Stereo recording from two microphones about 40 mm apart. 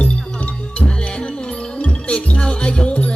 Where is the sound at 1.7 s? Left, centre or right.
Left.